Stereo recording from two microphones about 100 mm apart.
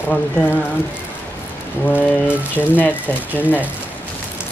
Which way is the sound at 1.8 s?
15° left (ahead or behind).